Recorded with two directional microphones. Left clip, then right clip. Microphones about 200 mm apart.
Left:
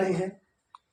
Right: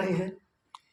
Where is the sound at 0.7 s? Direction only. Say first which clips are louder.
Right 2 dB; 40° right (ahead or behind).